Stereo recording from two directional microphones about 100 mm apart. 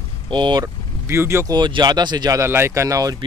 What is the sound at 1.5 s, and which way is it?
Speech, 45° right (ahead or behind).